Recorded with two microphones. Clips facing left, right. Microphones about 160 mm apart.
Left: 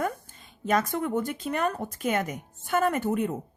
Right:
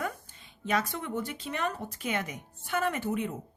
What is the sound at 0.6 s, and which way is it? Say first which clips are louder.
Speech: left 5 dB; 45° left (ahead or behind).